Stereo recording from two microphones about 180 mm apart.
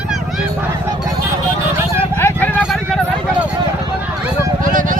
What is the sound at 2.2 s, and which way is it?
Vehicle, 10° left (ahead or behind).